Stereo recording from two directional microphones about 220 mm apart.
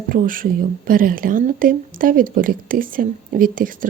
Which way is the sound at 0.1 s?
40° right (ahead or behind).